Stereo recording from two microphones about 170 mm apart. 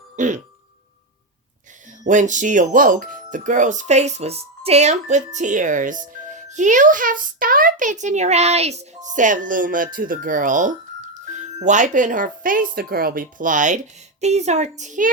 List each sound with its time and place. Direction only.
0.2 s speech: 45° right (ahead or behind)
2.0 s speech: 45° right (ahead or behind)